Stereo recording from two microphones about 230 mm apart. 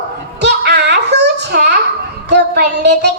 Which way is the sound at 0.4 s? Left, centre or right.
Right.